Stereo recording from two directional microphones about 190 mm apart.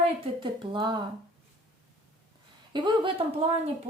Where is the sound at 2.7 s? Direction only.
25° right (ahead or behind).